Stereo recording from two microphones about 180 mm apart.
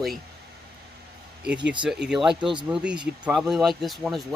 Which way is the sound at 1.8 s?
5° right (ahead or behind).